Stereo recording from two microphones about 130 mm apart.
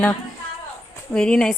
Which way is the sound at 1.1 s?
5° left (ahead or behind).